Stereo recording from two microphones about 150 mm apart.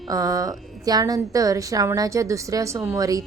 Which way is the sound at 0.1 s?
25° right (ahead or behind).